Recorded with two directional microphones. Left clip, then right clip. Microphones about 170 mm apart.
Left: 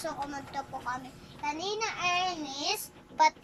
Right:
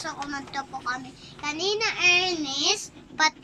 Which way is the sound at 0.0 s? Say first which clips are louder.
Right 3 dB; 15° left (ahead or behind).